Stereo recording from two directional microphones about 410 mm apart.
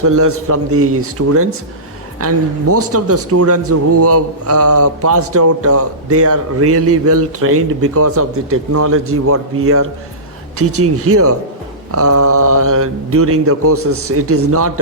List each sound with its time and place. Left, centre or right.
0.0 s speech: right